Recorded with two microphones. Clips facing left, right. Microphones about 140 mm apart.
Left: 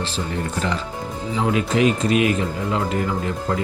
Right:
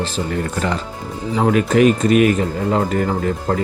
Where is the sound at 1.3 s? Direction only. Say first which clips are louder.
Right 5 dB; 50° right (ahead or behind).